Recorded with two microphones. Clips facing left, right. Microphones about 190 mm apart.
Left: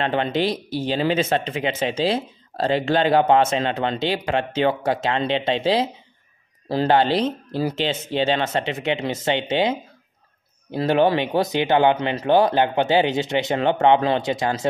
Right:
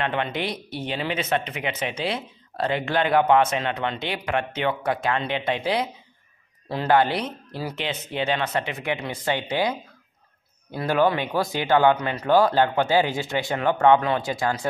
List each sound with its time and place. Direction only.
0.0 s speech: 30° left (ahead or behind)